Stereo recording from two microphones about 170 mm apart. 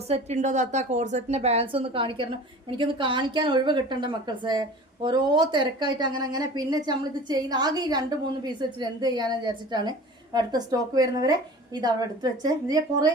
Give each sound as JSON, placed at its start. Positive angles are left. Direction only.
{"t": 0.1, "sound": "a woman's voice", "side_deg": -40}